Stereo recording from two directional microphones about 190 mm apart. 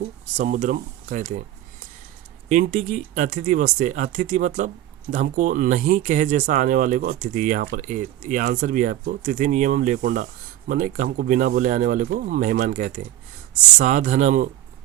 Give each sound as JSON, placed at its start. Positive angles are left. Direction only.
{"t": 0.3, "sound": "speech", "side_deg": -40}
{"t": 2.5, "sound": "speech", "side_deg": -40}